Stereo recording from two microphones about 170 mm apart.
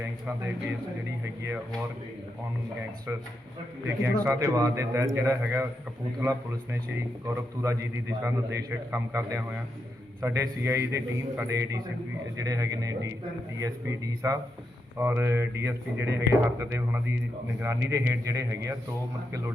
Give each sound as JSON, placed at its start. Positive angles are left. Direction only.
{"t": 3.1, "sound": "a man's voice", "side_deg": -15}